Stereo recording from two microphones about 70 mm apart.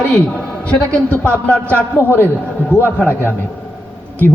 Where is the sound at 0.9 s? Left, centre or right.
Left.